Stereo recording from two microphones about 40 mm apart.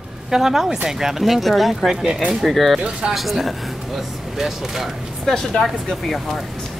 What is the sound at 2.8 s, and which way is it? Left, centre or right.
Speech, right.